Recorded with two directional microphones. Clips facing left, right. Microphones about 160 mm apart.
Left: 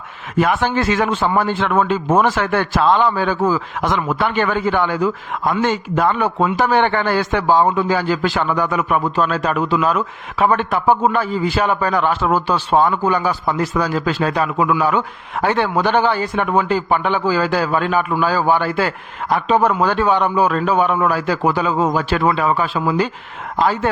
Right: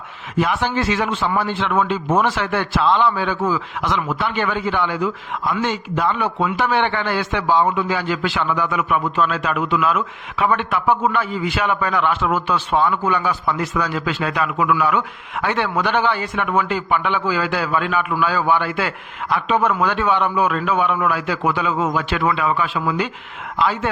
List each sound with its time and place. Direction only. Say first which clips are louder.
0.3 s a man's voice: left 3 dB; 50° left (ahead or behind)